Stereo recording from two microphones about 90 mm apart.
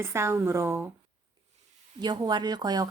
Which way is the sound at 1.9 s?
55° right (ahead or behind).